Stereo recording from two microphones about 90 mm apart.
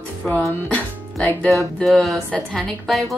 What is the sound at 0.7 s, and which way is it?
Music, 15° left (ahead or behind).